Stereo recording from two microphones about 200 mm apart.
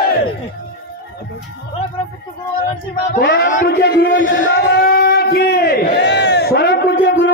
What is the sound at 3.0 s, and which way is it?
A man's voice, 55° left (ahead or behind).